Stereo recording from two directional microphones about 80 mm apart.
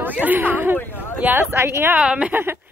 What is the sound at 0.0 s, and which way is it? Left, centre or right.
Speech, right.